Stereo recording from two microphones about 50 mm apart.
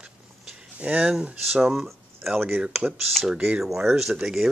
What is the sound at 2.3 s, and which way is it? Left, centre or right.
Speech, right.